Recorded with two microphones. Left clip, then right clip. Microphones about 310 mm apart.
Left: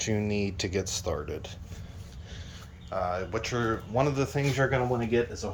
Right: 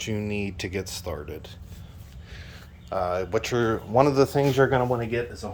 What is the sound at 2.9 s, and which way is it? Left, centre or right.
Speech, centre.